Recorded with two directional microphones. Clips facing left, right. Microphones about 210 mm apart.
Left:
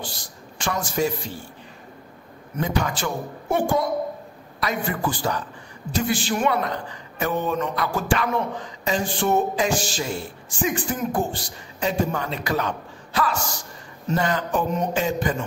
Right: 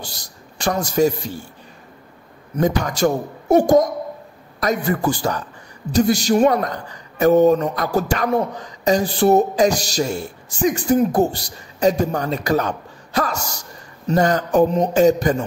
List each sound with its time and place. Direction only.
0.0 s a man's voice: 40° right (ahead or behind)
2.5 s a man's voice: 40° right (ahead or behind)